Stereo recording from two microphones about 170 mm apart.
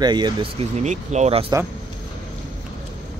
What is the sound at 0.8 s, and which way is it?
Speech, 45° right (ahead or behind).